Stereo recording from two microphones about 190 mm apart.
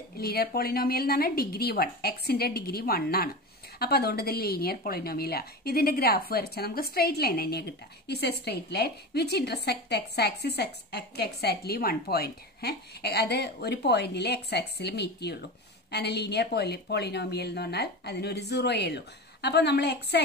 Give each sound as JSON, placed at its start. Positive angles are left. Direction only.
{"t": 0.2, "sound": "a woman's voice", "side_deg": 55}